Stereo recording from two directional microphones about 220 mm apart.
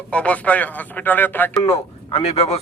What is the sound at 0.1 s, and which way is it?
A man's voice, 5° left (ahead or behind).